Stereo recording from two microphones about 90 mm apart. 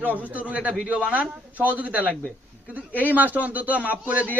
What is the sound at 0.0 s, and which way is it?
A man's voice, 20° right (ahead or behind).